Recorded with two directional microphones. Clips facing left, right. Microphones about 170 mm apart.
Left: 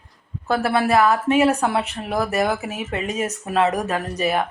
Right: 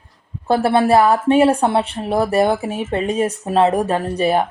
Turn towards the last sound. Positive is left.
turn(degrees=-30)  # may be behind; listen again after turning